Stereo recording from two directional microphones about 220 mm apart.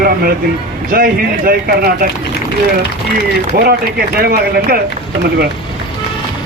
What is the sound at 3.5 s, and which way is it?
Speech, 45° right (ahead or behind).